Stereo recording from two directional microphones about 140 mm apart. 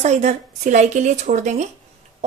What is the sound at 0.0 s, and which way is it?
A woman's voice, 55° right (ahead or behind).